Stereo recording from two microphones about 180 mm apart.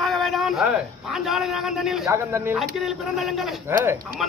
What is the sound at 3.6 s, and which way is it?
Speech, 15° right (ahead or behind).